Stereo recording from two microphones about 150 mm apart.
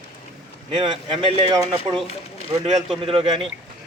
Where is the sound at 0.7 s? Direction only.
30° right (ahead or behind).